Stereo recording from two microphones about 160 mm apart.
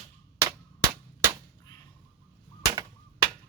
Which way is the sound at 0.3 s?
20° right (ahead or behind).